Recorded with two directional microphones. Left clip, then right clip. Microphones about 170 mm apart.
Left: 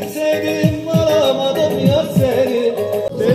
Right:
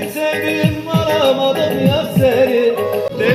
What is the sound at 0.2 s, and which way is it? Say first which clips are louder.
Music: left 1 dB; 90° left.